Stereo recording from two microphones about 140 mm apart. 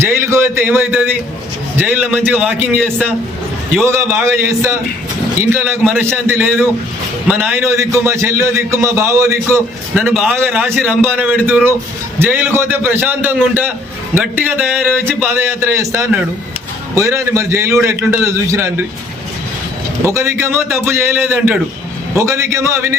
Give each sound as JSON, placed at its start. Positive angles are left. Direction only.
{"t": 0.0, "sound": "a man's voice", "side_deg": -20}
{"t": 3.8, "sound": "a man's voice", "side_deg": -20}
{"t": 20.1, "sound": "a man's voice", "side_deg": -20}